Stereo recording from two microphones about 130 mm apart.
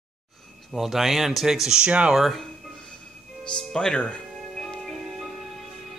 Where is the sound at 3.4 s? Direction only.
5° left (ahead or behind).